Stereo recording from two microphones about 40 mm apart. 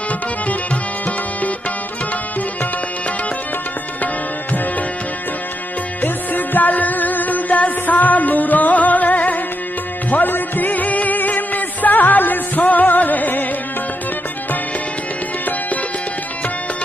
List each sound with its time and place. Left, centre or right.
5.9 s music: left
10.1 s music: left